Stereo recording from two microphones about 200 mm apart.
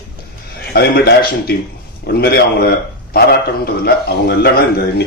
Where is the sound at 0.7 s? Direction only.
50° left (ahead or behind).